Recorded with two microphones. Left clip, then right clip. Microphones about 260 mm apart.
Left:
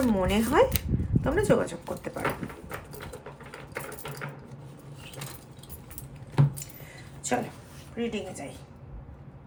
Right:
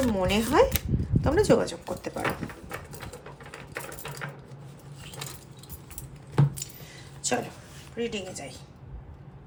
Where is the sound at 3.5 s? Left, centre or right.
Centre.